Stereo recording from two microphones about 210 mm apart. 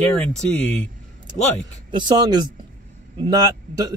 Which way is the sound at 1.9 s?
20° right (ahead or behind).